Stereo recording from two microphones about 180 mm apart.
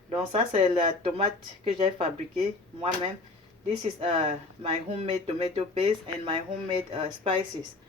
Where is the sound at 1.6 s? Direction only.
30° right (ahead or behind).